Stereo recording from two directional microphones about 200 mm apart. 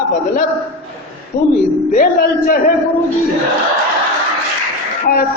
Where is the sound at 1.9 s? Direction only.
45° left (ahead or behind).